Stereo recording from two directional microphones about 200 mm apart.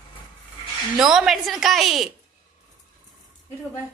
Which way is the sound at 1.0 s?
Centre (ahead or behind).